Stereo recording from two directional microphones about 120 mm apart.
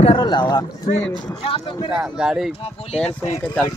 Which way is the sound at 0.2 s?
35° left (ahead or behind).